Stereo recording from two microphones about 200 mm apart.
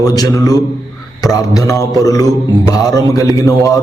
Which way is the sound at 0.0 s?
20° left (ahead or behind).